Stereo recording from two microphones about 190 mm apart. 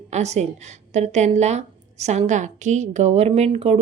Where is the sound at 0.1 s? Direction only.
35° right (ahead or behind).